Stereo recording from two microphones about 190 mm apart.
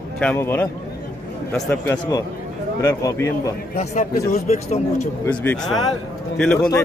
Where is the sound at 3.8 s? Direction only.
35° left (ahead or behind).